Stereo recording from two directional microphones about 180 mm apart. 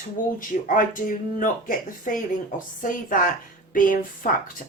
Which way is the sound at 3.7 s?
50° left (ahead or behind).